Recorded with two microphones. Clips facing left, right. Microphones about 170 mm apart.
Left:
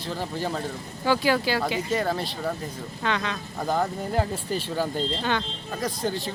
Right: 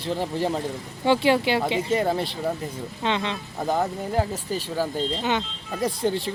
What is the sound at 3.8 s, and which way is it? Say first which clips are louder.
A man's voice: right 1 dB; 5° right (ahead or behind).